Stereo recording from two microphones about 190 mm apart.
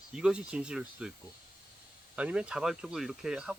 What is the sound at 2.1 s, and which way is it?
Speech, 5° right (ahead or behind).